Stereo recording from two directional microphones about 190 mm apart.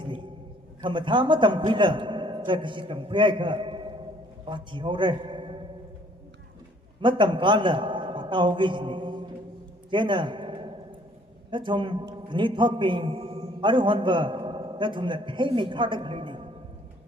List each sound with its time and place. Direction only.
0.8 s a man's voice: 25° right (ahead or behind)
7.0 s a man's voice: 25° right (ahead or behind)
9.9 s a sound: 25° right (ahead or behind)
11.5 s a man's voice: 25° right (ahead or behind)